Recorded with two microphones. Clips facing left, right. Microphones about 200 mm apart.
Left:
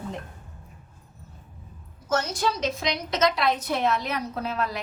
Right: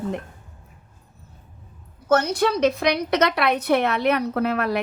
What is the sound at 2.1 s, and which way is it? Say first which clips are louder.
A woman's voice: right 6 dB; 60° right (ahead or behind).